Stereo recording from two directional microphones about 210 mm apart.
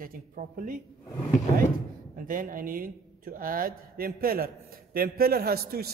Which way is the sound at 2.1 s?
40° right (ahead or behind).